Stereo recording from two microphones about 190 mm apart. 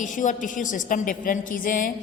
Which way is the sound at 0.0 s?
40° left (ahead or behind).